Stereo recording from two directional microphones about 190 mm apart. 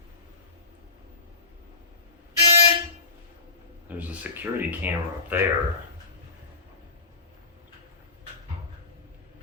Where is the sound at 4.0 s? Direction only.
10° right (ahead or behind).